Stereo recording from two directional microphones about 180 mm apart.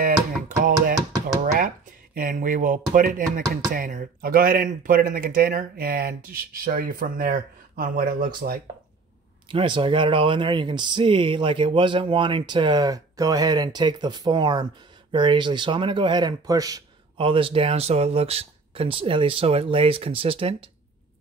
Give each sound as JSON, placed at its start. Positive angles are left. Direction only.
{"t": 0.0, "sound": "music", "side_deg": -50}
{"t": 2.1, "sound": "chopping", "side_deg": -50}
{"t": 9.5, "sound": "speech", "side_deg": -30}